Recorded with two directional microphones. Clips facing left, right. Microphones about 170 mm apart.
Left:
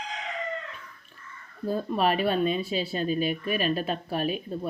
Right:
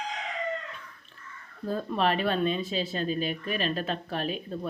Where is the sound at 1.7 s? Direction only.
10° left (ahead or behind).